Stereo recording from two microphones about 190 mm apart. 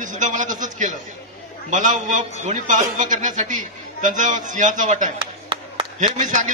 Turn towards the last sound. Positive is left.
turn(degrees=-40)  # may be behind; listen again after turning